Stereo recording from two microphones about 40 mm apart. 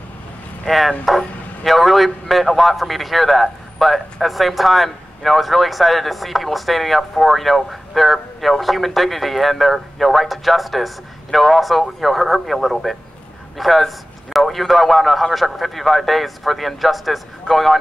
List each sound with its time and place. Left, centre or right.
0.7 s speech: centre